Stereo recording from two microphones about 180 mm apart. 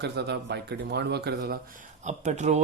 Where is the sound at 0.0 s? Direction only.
70° right (ahead or behind).